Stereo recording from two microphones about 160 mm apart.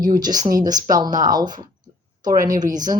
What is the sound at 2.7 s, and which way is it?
Speech, 25° right (ahead or behind).